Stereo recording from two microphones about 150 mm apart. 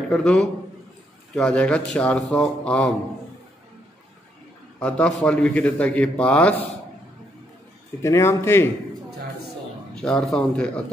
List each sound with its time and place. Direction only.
0.1 s a man's voice: 5° left (ahead or behind)
4.7 s a man's voice: 5° left (ahead or behind)
8.0 s a man's voice: 20° left (ahead or behind)
9.9 s speech: 5° left (ahead or behind)